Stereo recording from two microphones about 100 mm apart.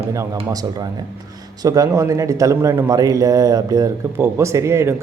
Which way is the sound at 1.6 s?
35° right (ahead or behind).